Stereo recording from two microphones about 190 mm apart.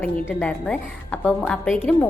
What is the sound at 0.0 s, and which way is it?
A woman's voice, 5° left (ahead or behind).